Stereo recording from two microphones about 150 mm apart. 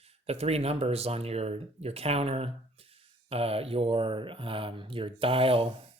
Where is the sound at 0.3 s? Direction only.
45° right (ahead or behind).